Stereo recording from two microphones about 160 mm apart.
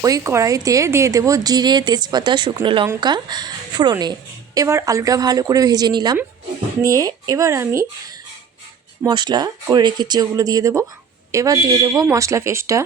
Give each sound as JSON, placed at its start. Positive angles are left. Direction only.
{"t": 0.0, "sound": "a woman's voice", "side_deg": -20}
{"t": 9.0, "sound": "a woman's voice", "side_deg": -25}